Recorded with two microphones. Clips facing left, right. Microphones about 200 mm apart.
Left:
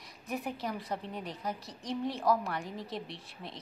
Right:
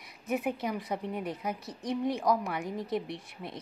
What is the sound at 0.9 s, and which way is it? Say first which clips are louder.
Speech: right 4 dB; 5° right (ahead or behind).